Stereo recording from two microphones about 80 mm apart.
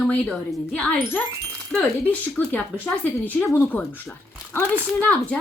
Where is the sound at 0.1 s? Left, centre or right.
Centre.